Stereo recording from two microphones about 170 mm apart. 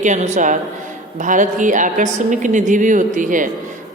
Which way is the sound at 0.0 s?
45° right (ahead or behind).